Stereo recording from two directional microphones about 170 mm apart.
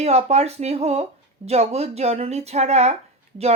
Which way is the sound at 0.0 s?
40° right (ahead or behind).